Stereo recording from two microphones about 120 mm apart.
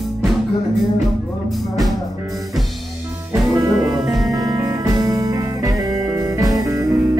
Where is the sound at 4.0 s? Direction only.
Centre (ahead or behind).